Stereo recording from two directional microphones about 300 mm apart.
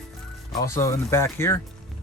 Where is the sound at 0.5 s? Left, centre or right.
Centre.